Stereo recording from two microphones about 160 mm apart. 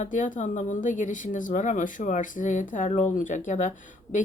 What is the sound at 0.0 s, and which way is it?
Speech, 50° left (ahead or behind).